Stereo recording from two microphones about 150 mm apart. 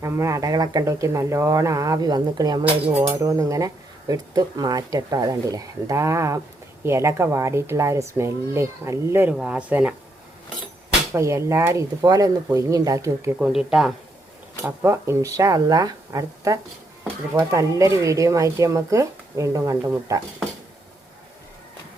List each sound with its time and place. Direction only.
0.0 s speech: 20° right (ahead or behind)
11.1 s speech: 20° right (ahead or behind)
13.4 s speech: 5° right (ahead or behind)
14.6 s speech: 15° right (ahead or behind)